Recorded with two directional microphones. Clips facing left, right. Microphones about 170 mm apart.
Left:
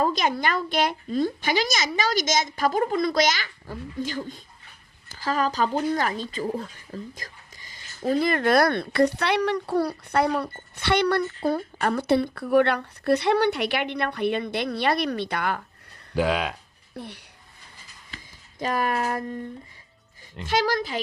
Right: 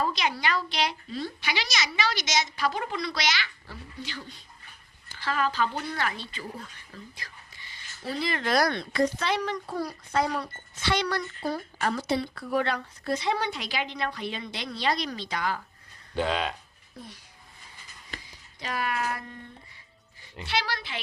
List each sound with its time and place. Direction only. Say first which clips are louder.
0.0 s a woman's voice: left 5 dB; 45° left (ahead or behind)
16.1 s speech: left 4 dB; 10° left (ahead or behind)
17.0 s speech: left 7 dB; 70° left (ahead or behind)
18.6 s a woman's voice: left 6 dB; 45° left (ahead or behind)
20.4 s a woman's voice: left 8 dB; 45° left (ahead or behind)